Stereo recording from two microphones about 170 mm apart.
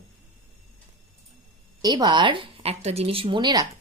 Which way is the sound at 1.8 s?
25° right (ahead or behind).